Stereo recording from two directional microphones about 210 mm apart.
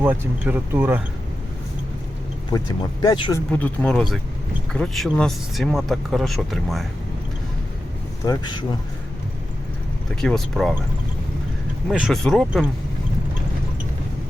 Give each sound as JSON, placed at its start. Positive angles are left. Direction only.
{"t": 0.0, "sound": "speech", "side_deg": -10}
{"t": 2.5, "sound": "speech", "side_deg": 20}
{"t": 3.5, "sound": "speech", "side_deg": 5}
{"t": 8.2, "sound": "speech", "side_deg": 20}
{"t": 10.2, "sound": "speech", "side_deg": 0}
{"t": 11.9, "sound": "speech", "side_deg": 0}